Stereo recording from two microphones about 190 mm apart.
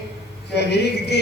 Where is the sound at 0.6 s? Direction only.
60° left (ahead or behind).